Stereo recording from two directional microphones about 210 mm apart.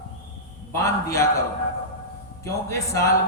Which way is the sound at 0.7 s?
15° left (ahead or behind).